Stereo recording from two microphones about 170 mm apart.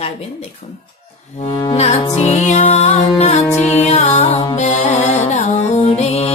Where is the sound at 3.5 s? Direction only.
10° left (ahead or behind).